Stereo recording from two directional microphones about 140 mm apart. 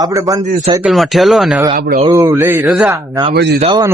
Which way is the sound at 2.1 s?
20° right (ahead or behind).